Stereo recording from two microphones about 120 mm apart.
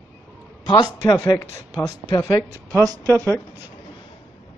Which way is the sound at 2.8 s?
30° right (ahead or behind).